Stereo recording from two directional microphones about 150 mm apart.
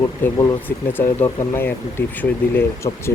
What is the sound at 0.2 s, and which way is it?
Speech, 25° left (ahead or behind).